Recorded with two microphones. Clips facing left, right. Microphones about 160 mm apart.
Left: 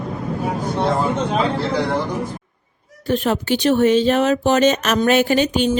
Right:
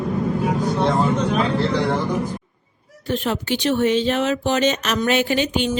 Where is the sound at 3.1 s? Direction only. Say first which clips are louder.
Left 4 dB; 45° left (ahead or behind).